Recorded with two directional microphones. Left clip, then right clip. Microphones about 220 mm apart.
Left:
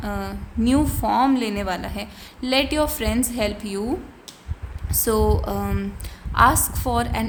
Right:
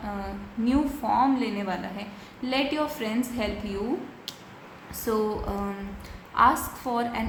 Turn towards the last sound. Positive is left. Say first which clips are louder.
# left 4 dB
turn(degrees=45)  # may be behind; listen again after turning